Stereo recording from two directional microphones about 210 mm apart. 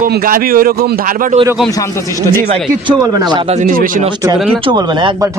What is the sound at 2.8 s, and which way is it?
Speech, 20° right (ahead or behind).